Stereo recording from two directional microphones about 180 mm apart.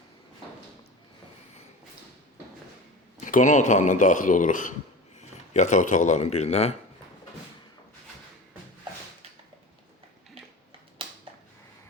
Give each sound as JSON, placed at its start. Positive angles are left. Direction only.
{"t": 3.2, "sound": "speech", "side_deg": 45}